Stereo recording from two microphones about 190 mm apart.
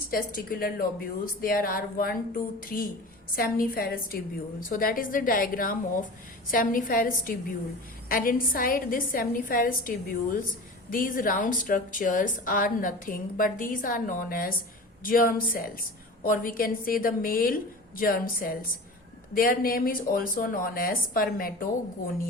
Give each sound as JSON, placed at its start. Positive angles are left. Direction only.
{"t": 0.1, "sound": "a woman's voice", "side_deg": 50}